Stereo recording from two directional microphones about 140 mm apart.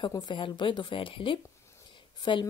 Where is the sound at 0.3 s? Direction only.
35° left (ahead or behind).